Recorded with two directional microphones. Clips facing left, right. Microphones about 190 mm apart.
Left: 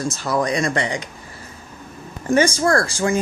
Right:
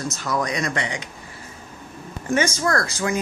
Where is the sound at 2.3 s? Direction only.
30° left (ahead or behind).